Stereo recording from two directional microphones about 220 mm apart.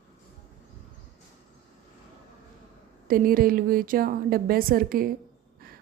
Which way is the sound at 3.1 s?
40° right (ahead or behind).